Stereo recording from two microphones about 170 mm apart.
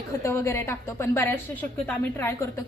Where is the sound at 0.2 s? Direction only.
15° left (ahead or behind).